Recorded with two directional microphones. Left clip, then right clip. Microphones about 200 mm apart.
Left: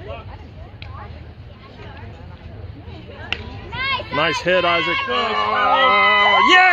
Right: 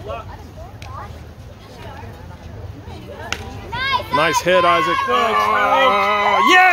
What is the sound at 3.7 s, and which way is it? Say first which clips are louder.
Children playing: right 3 dB; 40° left (ahead or behind).